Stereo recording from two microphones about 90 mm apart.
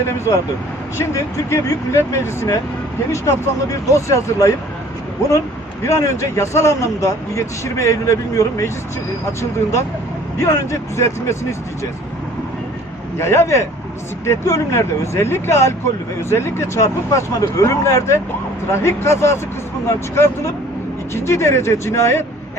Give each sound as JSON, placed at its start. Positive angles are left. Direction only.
{"t": 0.9, "sound": "speech", "side_deg": 30}
{"t": 5.8, "sound": "speech", "side_deg": 35}
{"t": 10.3, "sound": "speech", "side_deg": 35}
{"t": 13.1, "sound": "speech", "side_deg": 30}